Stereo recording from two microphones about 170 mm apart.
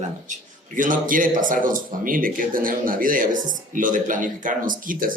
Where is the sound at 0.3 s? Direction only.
50° right (ahead or behind).